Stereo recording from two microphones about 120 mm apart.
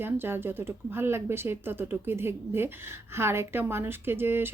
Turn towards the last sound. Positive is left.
turn(degrees=-20)  # may be behind; listen again after turning